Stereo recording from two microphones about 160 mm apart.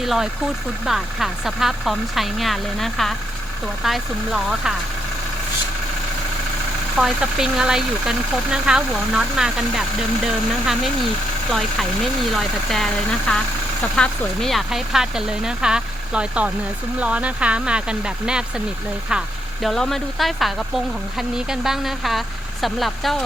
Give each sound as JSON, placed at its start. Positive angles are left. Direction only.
{"t": 0.0, "sound": "speech", "side_deg": 0}
{"t": 6.9, "sound": "speech", "side_deg": -5}
{"t": 12.3, "sound": "speech", "side_deg": 0}
{"t": 19.6, "sound": "speech", "side_deg": 0}